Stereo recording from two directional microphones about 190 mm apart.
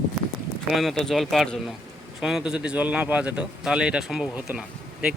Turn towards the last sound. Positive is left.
turn(degrees=-5)  # may be behind; listen again after turning